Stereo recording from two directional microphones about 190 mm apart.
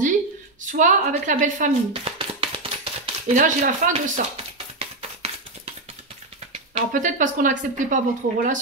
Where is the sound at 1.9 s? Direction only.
30° right (ahead or behind).